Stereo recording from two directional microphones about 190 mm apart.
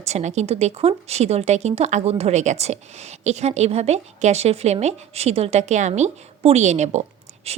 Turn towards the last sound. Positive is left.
turn(degrees=-35)  # may be behind; listen again after turning